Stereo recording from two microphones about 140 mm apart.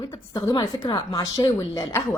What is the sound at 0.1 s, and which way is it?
A woman's voice, 25° left (ahead or behind).